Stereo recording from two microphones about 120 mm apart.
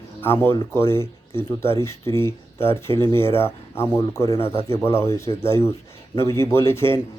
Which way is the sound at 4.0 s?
30° left (ahead or behind).